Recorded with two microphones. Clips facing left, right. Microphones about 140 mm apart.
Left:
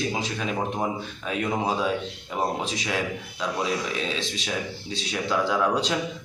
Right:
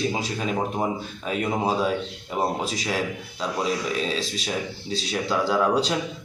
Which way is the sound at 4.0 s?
35° right (ahead or behind).